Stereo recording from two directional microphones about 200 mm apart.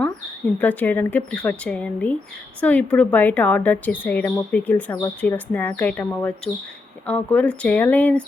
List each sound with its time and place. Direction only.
0.6 s speech: 10° left (ahead or behind)